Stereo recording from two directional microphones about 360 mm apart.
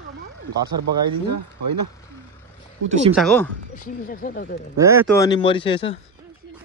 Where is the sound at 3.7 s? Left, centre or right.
Left.